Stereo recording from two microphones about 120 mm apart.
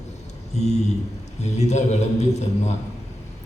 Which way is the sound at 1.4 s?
70° left (ahead or behind).